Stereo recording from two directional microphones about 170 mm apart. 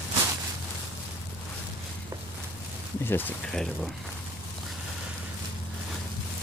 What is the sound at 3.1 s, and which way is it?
Speech, 10° left (ahead or behind).